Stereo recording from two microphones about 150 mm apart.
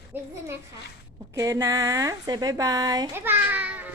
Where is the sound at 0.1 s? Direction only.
15° right (ahead or behind).